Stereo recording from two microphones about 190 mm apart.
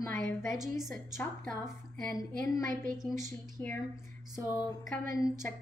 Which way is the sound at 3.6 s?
10° left (ahead or behind).